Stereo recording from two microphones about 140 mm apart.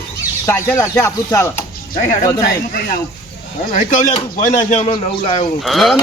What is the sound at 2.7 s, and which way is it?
Speech, 90° left.